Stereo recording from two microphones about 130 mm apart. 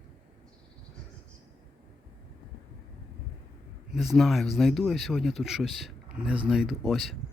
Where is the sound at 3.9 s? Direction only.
Centre (ahead or behind).